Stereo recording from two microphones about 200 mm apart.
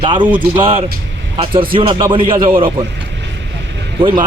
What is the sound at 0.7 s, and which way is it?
Speech, 30° right (ahead or behind).